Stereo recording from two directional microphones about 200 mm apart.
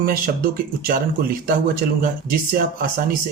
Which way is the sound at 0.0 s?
45° right (ahead or behind).